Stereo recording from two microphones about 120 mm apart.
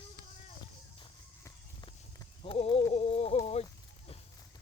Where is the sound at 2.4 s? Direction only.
50° left (ahead or behind).